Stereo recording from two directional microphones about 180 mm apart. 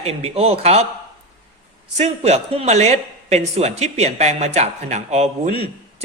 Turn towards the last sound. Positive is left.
turn(degrees=-40)  # may be behind; listen again after turning